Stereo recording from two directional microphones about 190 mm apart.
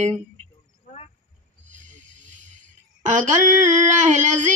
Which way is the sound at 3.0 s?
40° right (ahead or behind).